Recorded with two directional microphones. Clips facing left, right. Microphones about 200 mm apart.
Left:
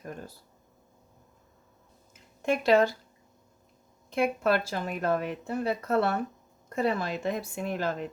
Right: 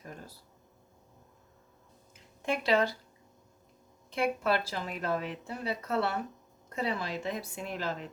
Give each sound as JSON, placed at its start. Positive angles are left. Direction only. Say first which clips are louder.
{"t": 2.5, "sound": "speech", "louder": "left 5 dB", "side_deg": 45}
{"t": 4.1, "sound": "speech", "louder": "left 4 dB", "side_deg": 50}